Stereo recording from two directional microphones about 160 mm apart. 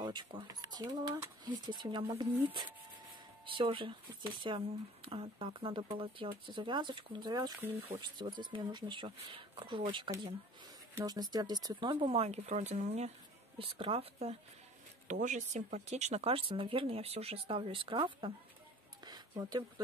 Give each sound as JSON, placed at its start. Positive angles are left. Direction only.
{"t": 0.0, "sound": "speech", "side_deg": -25}
{"t": 3.4, "sound": "speech", "side_deg": -30}
{"t": 11.9, "sound": "speech", "side_deg": -40}
{"t": 15.0, "sound": "speech", "side_deg": -50}
{"t": 19.0, "sound": "a sound", "side_deg": -25}